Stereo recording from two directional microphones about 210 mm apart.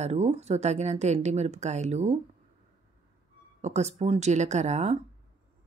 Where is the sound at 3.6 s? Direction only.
30° right (ahead or behind).